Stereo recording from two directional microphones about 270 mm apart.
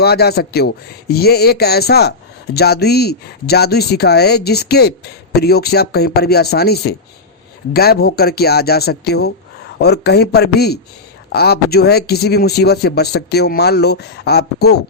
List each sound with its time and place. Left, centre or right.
0.0 s speech: left